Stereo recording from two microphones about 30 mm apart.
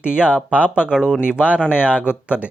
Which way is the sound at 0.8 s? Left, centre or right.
Right.